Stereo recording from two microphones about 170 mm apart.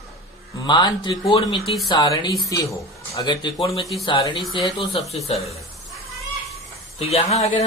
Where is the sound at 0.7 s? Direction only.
25° left (ahead or behind).